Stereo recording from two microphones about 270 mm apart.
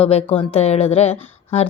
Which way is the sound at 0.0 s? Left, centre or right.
Left.